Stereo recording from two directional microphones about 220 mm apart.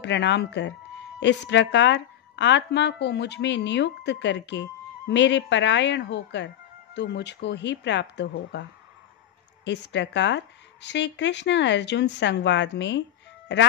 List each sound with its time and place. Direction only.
0.0 s a woman's voice: 55° left (ahead or behind)
9.7 s a woman's voice: 55° left (ahead or behind)